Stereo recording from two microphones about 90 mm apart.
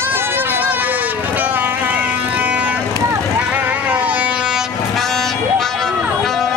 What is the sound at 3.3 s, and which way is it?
Goat, 15° right (ahead or behind).